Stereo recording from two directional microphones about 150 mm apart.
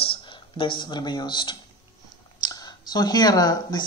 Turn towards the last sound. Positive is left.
turn(degrees=25)  # may be behind; listen again after turning